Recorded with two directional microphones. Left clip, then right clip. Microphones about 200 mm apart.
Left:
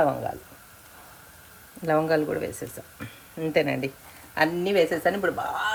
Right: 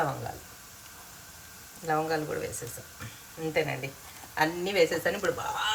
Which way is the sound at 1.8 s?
40° left (ahead or behind).